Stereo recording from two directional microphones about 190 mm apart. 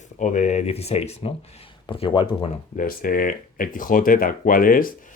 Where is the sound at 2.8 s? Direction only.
50° left (ahead or behind).